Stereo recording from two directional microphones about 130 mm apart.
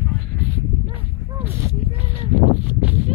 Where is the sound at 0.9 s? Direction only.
15° right (ahead or behind).